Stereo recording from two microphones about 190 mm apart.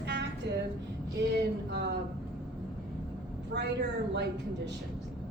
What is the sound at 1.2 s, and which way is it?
Speech, 65° right (ahead or behind).